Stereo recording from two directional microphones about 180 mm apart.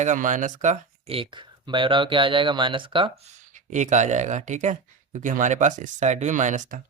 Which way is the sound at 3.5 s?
45° right (ahead or behind).